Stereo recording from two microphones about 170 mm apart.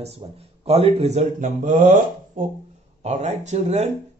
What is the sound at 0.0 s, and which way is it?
Speech, 35° right (ahead or behind).